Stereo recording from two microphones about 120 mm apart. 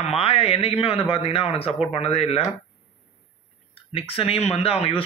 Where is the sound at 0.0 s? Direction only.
55° left (ahead or behind).